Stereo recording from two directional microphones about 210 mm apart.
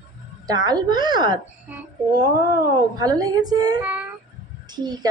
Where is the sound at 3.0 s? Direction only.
15° right (ahead or behind).